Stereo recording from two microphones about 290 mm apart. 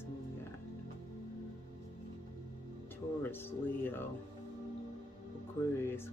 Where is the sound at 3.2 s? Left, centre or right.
Centre.